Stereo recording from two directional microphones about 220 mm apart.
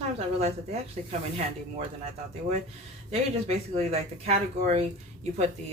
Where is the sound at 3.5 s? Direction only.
30° right (ahead or behind).